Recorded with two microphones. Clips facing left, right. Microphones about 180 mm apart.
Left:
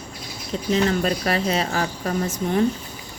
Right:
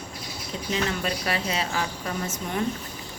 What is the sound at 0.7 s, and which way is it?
Speech, 40° left (ahead or behind).